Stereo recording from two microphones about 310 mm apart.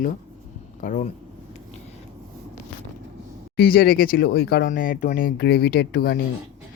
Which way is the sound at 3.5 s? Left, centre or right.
Left.